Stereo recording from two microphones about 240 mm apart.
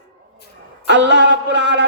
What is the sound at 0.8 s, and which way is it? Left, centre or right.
A man's voice, right.